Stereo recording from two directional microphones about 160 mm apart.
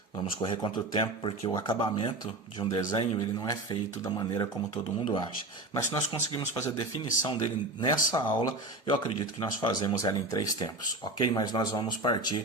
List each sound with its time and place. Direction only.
0.2 s speech: 30° left (ahead or behind)